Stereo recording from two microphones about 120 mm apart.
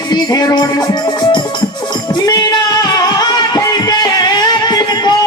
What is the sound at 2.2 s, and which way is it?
Singing, 30° left (ahead or behind).